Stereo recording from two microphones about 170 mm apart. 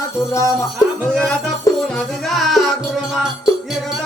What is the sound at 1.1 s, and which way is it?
Music, 5° left (ahead or behind).